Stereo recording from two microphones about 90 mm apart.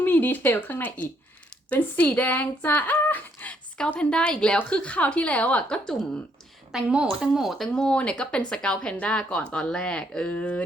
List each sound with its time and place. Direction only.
0.0 s speech: 20° left (ahead or behind)
6.7 s speech: 10° right (ahead or behind)
7.8 s speech: 10° left (ahead or behind)